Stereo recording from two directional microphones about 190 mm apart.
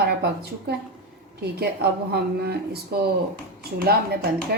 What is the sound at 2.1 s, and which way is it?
A woman's voice, 55° right (ahead or behind).